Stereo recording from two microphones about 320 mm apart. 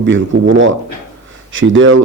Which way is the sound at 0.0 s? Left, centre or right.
Right.